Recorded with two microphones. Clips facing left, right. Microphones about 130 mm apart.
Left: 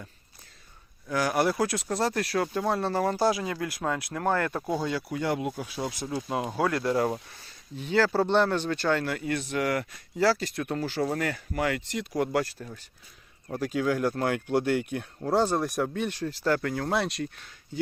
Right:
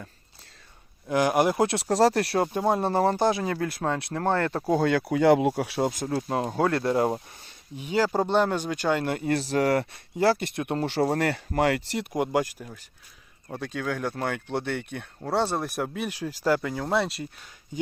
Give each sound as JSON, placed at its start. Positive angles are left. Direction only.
{"t": 1.1, "sound": "speech", "side_deg": -20}
{"t": 4.7, "sound": "speech", "side_deg": -60}
{"t": 5.8, "sound": "speech", "side_deg": -50}
{"t": 6.1, "sound": "speech", "side_deg": -30}
{"t": 7.8, "sound": "speech", "side_deg": -15}
{"t": 9.0, "sound": "speech", "side_deg": -30}
{"t": 12.1, "sound": "speech", "side_deg": -15}
{"t": 13.5, "sound": "speech", "side_deg": 5}